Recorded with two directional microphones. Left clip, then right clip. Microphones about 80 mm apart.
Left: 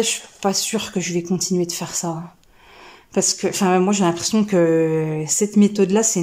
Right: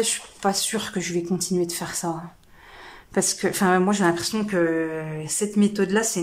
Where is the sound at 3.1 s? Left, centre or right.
Centre; by 4.4 s left.